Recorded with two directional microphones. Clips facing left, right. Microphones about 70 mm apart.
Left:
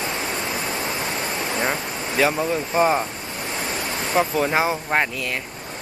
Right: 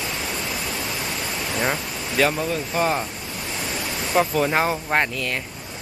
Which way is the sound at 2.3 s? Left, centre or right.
Left.